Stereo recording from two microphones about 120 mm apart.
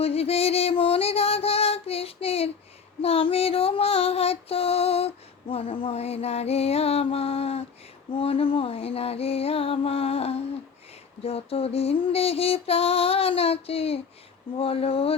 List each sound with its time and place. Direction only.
0.0 s female singing: 55° left (ahead or behind)
14.6 s speech: 55° left (ahead or behind)